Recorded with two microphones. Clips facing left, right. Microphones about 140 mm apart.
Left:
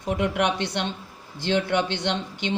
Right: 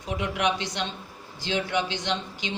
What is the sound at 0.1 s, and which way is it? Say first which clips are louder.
Speech: left 3 dB; 55° left (ahead or behind).